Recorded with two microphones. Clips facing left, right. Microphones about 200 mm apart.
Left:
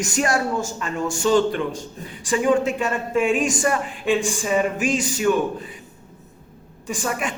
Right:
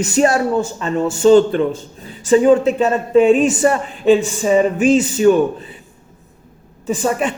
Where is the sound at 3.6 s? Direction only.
30° right (ahead or behind).